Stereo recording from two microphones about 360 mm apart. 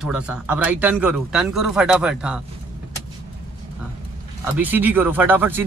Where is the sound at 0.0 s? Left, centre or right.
Centre.